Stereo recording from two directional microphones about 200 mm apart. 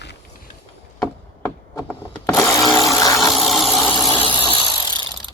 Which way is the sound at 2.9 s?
15° left (ahead or behind).